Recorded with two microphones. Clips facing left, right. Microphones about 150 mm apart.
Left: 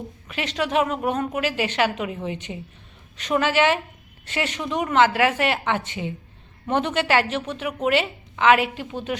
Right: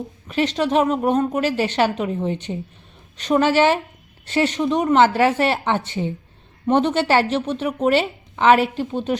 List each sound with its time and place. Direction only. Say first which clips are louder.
0.3 s a woman's voice: right 6 dB; 30° right (ahead or behind)